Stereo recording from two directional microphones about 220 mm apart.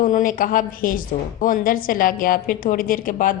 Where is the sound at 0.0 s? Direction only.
35° left (ahead or behind).